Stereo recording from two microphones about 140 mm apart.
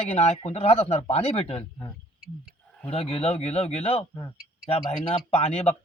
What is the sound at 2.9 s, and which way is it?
A man's voice, 45° left (ahead or behind).